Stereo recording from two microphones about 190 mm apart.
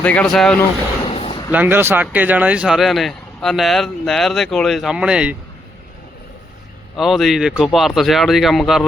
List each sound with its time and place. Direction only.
0.0 s speech: 5° left (ahead or behind)
1.0 s a sound: 30° left (ahead or behind)
1.5 s speech: 10° right (ahead or behind)
6.9 s speech: centre (ahead or behind)